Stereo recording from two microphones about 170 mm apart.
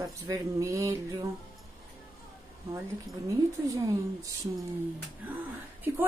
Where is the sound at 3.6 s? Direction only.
20° right (ahead or behind).